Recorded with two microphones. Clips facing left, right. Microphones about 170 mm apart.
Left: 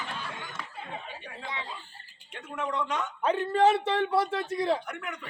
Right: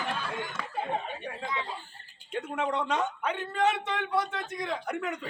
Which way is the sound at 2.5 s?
30° right (ahead or behind).